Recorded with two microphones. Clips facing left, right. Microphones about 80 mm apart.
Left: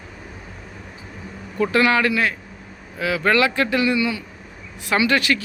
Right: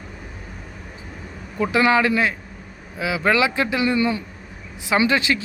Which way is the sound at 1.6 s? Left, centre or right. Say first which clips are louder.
Even; centre.